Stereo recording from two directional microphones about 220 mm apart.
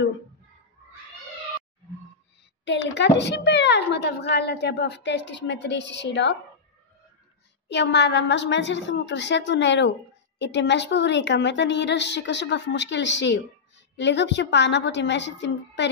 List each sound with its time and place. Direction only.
2.6 s a woman's voice: 55° left (ahead or behind)
7.6 s a woman's voice: 50° left (ahead or behind)